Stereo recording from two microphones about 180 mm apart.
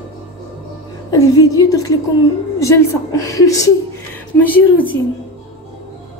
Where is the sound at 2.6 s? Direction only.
15° left (ahead or behind).